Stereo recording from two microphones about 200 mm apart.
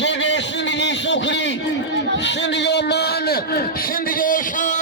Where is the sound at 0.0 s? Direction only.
65° left (ahead or behind).